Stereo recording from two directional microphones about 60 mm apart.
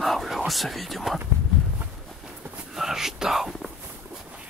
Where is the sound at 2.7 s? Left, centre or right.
Centre.